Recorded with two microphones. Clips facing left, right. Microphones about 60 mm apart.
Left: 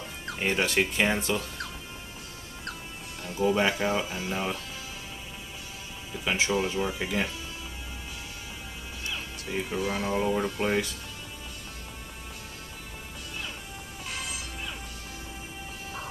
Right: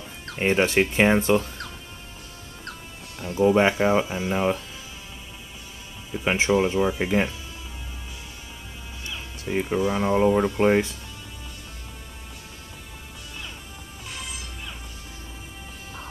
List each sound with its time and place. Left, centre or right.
0.4 s speech: right
3.2 s music: centre
3.4 s speech: right
6.2 s speech: right
9.5 s speech: right